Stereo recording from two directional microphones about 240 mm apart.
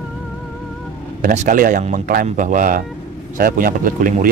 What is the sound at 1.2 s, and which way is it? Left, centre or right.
Speech, right.